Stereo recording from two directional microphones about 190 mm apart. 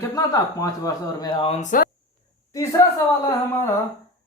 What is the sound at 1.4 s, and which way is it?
Speech, 45° left (ahead or behind).